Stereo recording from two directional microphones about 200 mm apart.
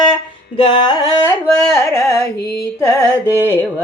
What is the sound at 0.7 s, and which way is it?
Carnatic music, 20° left (ahead or behind).